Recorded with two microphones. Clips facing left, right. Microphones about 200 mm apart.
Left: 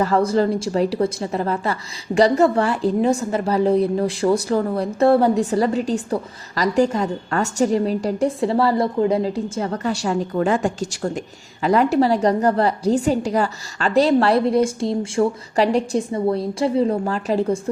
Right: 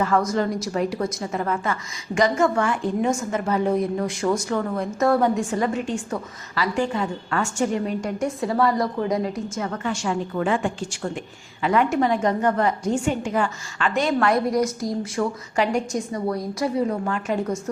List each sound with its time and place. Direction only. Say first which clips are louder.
0.0 s a woman's voice: left 4 dB; 35° left (ahead or behind)